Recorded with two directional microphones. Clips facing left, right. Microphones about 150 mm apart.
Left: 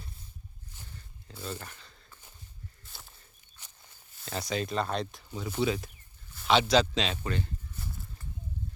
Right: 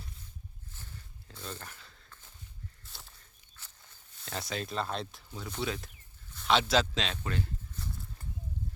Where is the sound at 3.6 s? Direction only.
15° left (ahead or behind).